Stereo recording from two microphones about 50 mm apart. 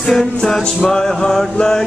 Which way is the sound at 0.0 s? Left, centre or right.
Centre.